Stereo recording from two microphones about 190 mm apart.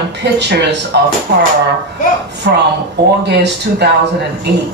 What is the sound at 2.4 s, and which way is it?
A woman's voice, 55° right (ahead or behind).